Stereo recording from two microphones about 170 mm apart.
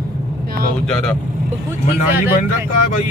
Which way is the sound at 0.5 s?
65° right (ahead or behind).